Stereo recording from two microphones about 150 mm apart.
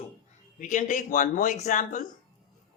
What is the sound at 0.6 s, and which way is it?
Speech, 55° left (ahead or behind).